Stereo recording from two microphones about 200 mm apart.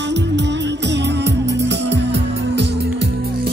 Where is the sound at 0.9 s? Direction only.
60° right (ahead or behind).